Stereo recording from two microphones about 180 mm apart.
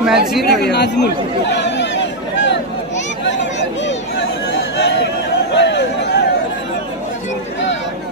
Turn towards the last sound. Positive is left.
turn(degrees=70)  # may be behind; listen again after turning